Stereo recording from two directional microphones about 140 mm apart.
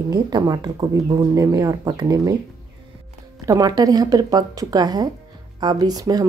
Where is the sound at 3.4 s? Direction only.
25° right (ahead or behind).